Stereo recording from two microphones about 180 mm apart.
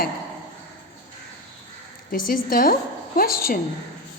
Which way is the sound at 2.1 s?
50° left (ahead or behind).